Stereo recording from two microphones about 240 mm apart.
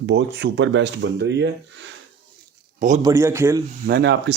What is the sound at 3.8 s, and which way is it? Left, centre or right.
Speech, right.